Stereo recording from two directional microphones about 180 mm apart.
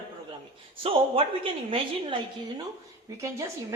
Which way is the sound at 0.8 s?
30° right (ahead or behind).